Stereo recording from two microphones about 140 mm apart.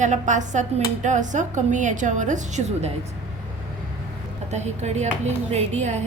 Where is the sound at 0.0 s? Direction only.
60° right (ahead or behind).